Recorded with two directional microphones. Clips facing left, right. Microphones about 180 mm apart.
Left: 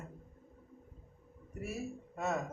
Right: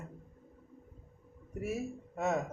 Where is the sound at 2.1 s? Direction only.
15° right (ahead or behind).